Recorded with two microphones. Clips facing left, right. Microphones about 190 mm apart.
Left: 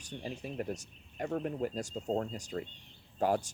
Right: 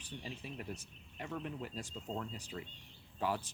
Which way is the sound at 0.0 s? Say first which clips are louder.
Left 6 dB; 45° left (ahead or behind).